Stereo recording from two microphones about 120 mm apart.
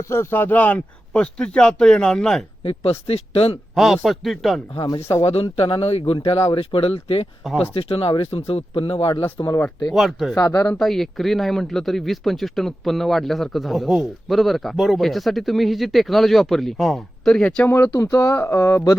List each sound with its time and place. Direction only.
0.1 s speech: 20° left (ahead or behind)
2.6 s speech: 50° left (ahead or behind)
3.8 s speech: centre (ahead or behind)
4.7 s speech: 55° left (ahead or behind)
9.9 s speech: centre (ahead or behind)
10.3 s speech: 25° left (ahead or behind)
10.8 s speech: centre (ahead or behind); by 18.9 s 25° left (ahead or behind)